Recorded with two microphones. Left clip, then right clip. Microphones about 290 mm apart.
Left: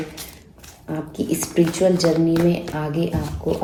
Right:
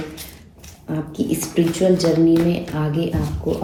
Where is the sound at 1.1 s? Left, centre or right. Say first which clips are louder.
Even; left.